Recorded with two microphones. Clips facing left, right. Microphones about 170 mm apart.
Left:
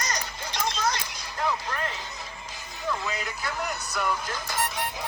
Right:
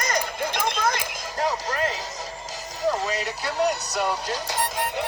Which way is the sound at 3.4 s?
35° right (ahead or behind).